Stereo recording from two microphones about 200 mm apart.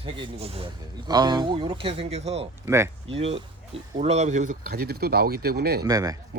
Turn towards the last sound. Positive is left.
turn(degrees=-20)  # may be behind; listen again after turning